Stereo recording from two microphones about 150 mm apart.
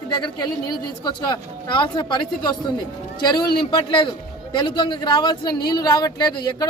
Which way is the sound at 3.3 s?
25° left (ahead or behind).